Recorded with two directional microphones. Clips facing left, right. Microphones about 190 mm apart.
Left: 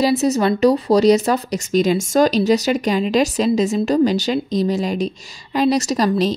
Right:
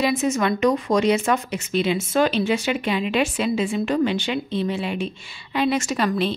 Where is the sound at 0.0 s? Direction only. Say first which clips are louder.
Left 5 dB; 35° left (ahead or behind).